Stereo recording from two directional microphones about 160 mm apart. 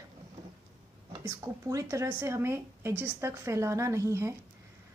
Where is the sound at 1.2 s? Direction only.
20° right (ahead or behind).